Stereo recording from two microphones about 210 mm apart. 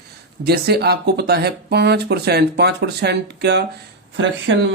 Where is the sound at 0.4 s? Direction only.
50° right (ahead or behind).